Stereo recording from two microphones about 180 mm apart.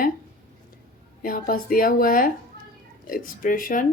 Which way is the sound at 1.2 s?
50° left (ahead or behind).